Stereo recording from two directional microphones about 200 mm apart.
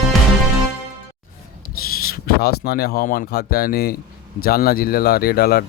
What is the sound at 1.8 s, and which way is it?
Speech, 50° left (ahead or behind).